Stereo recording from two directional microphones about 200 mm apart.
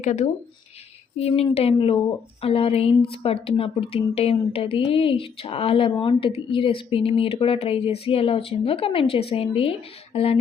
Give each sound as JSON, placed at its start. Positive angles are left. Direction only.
{"t": 0.0, "sound": "speech", "side_deg": 40}
{"t": 1.5, "sound": "speech", "side_deg": 30}